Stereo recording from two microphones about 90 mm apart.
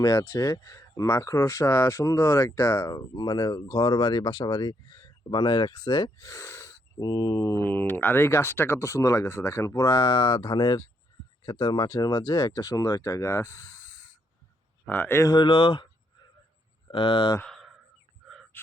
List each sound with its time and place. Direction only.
0.0 s speech: 35° left (ahead or behind)
3.2 s speech: 50° left (ahead or behind)
6.2 s speech: 35° left (ahead or behind)
7.6 s speech: 25° left (ahead or behind)
15.2 s speech: 55° left (ahead or behind)
16.9 s speech: 65° left (ahead or behind)
18.5 s speech: 20° left (ahead or behind)